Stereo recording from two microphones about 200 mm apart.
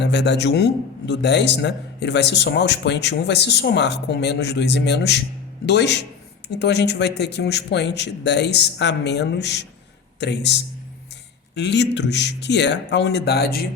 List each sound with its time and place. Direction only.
0.0 s a man's voice: 60° left (ahead or behind)